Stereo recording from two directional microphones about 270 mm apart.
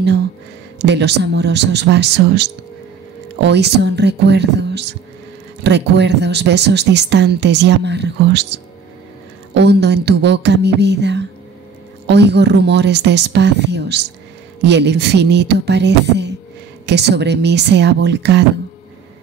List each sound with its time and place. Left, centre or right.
0.7 s speech: right